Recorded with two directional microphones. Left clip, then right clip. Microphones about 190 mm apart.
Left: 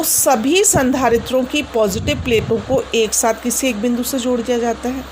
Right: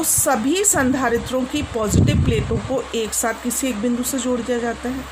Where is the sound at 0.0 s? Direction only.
25° left (ahead or behind).